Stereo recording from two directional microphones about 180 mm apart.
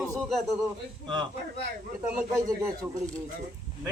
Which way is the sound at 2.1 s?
15° right (ahead or behind).